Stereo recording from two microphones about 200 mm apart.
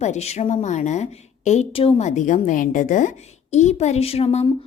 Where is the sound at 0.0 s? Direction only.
35° left (ahead or behind).